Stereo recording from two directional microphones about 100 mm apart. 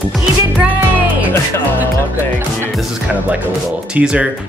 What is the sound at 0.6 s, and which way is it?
Music, 15° right (ahead or behind).